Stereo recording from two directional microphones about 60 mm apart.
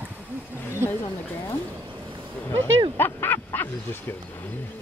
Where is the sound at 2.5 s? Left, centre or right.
Left.